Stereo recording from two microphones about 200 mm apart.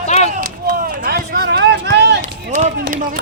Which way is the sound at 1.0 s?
50° right (ahead or behind).